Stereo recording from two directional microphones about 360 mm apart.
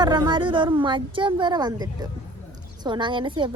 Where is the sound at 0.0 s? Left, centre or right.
Centre.